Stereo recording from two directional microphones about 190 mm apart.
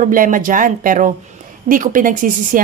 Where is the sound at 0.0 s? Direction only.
45° right (ahead or behind).